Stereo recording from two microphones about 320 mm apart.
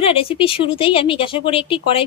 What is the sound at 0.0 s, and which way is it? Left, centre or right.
Speech, centre.